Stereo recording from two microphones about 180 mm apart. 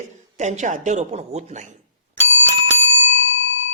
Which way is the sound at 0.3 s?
40° right (ahead or behind).